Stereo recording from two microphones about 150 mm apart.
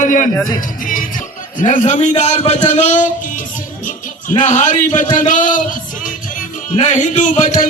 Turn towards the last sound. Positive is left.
turn(degrees=65)  # may be behind; listen again after turning